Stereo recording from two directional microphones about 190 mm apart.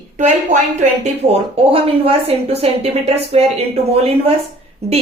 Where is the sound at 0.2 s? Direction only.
40° right (ahead or behind).